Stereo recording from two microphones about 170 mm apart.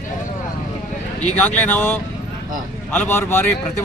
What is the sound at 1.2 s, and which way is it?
Speech, 10° left (ahead or behind).